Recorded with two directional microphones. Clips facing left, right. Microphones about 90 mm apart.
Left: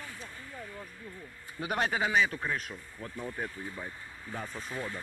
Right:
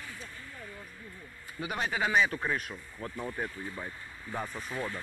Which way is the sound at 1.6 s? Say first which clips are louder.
Left 3 dB; 45° left (ahead or behind).